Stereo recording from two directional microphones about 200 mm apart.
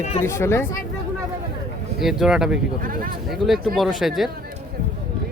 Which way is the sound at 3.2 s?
Centre (ahead or behind).